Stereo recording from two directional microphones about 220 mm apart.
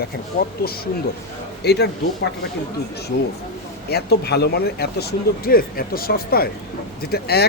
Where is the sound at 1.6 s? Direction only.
50° left (ahead or behind).